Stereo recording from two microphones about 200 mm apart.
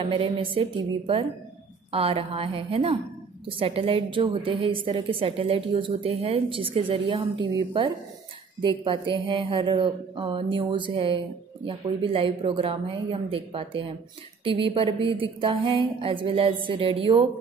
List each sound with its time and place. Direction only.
0.0 s a woman's voice: 25° right (ahead or behind)